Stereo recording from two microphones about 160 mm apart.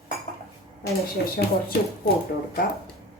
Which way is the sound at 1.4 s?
75° left (ahead or behind).